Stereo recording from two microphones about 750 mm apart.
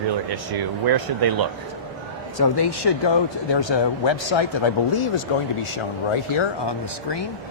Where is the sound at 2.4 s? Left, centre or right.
Left.